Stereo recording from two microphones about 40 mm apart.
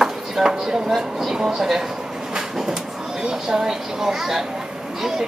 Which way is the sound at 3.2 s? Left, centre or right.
Centre.